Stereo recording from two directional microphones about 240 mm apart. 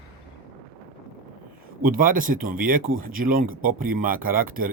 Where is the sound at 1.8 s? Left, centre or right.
Right.